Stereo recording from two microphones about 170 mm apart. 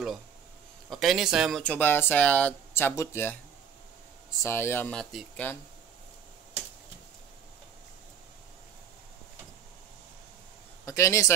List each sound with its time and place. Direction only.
0.8 s a man's voice: centre (ahead or behind)
1.6 s speech: 10° left (ahead or behind)
4.4 s speech: 15° left (ahead or behind)
10.9 s speech: 15° left (ahead or behind)